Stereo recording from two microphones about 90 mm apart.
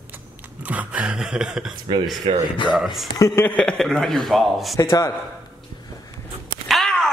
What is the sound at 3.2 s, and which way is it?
Speech, 30° left (ahead or behind).